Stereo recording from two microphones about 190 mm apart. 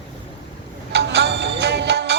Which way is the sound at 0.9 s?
65° right (ahead or behind).